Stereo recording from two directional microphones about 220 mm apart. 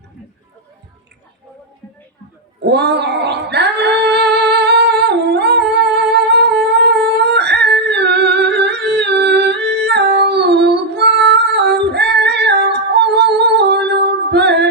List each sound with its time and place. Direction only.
2.6 s female singing: 50° right (ahead or behind)